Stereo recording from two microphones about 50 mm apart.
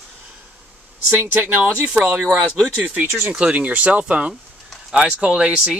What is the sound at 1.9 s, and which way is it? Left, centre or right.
Speech, right.